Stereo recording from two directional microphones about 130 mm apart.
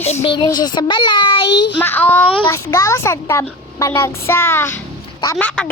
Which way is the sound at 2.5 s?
20° left (ahead or behind).